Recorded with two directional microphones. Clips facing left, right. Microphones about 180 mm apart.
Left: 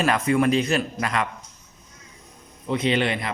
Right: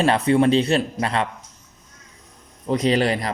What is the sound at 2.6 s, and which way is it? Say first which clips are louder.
Speech: right 3 dB; 40° right (ahead or behind).